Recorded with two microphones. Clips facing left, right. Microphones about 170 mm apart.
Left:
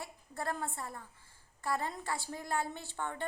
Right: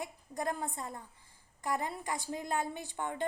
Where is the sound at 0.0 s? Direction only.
15° right (ahead or behind).